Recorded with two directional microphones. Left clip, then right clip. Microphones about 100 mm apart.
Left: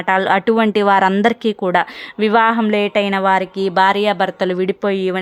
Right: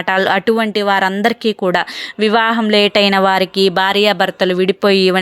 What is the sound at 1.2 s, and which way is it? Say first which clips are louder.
Speech: right 1 dB; 5° left (ahead or behind).